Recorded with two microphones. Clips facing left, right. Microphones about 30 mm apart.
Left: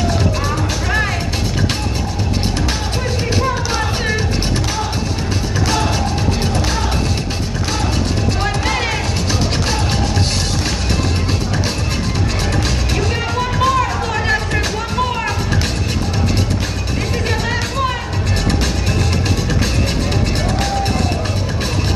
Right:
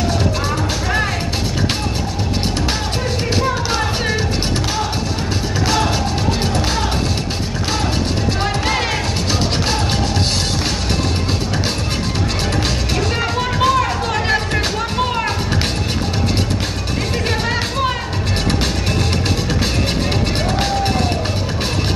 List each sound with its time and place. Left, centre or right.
0.8 s music: centre
3.7 s music: centre
8.6 s music: centre
13.2 s music: centre
17.3 s music: centre